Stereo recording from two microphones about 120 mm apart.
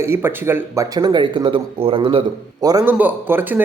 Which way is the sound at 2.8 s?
15° right (ahead or behind).